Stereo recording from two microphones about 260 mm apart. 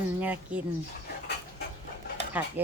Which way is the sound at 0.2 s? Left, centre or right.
Centre.